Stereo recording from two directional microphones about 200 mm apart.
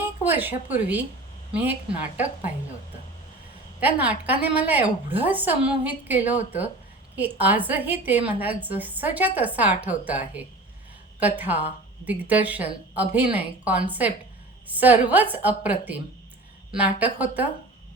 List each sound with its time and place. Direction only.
0.0 s a woman's voice: 10° right (ahead or behind)
3.8 s a woman's voice: 10° right (ahead or behind)